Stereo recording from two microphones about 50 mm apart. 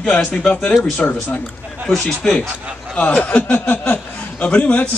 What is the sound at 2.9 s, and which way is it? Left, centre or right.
A man's voice, left.